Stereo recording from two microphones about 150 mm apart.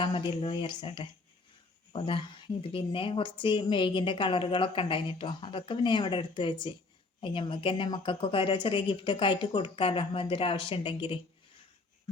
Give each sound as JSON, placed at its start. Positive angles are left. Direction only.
{"t": 0.0, "sound": "speech", "side_deg": 35}